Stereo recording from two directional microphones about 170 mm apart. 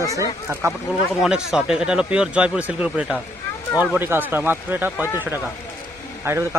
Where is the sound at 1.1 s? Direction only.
5° right (ahead or behind).